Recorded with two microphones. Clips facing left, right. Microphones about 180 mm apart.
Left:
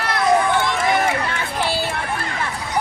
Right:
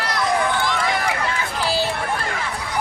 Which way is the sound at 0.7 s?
25° left (ahead or behind).